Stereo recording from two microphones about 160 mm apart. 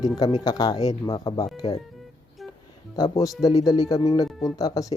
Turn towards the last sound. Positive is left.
turn(degrees=20)  # may be behind; listen again after turning